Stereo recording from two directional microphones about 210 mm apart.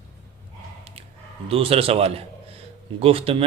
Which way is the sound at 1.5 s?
25° right (ahead or behind).